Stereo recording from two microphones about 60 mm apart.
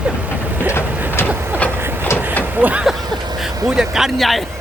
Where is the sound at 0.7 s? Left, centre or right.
Left.